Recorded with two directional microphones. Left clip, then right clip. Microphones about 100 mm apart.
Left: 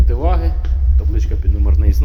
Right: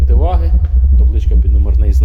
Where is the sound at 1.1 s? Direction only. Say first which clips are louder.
Right 1 dB; 80° right.